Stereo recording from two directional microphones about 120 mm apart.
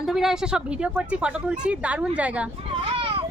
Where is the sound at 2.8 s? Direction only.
50° right (ahead or behind).